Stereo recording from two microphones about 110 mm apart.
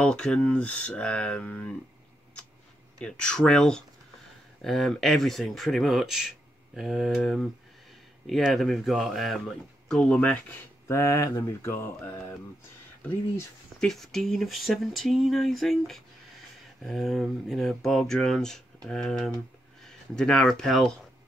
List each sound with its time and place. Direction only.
0.0 s speech: 10° left (ahead or behind)
3.0 s speech: 10° left (ahead or behind)
10.9 s speech: 30° left (ahead or behind)
13.7 s speech: 5° left (ahead or behind)